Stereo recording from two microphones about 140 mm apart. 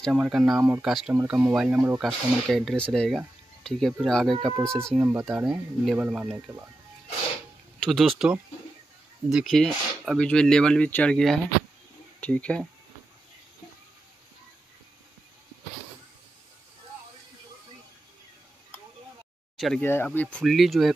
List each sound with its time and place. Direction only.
0.0 s speech: 5° right (ahead or behind)
0.6 s speech: 15° right (ahead or behind)
0.8 s speech: centre (ahead or behind)
4.9 s speech: 20° right (ahead or behind)
5.3 s speech: 5° right (ahead or behind)
7.8 s speech: centre (ahead or behind)
9.3 s speech: centre (ahead or behind)
19.5 s a sound: centre (ahead or behind)
19.8 s speech: 15° left (ahead or behind); by 20.9 s centre (ahead or behind)